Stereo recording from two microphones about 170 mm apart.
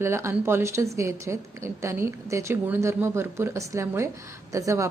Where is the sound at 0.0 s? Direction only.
15° right (ahead or behind).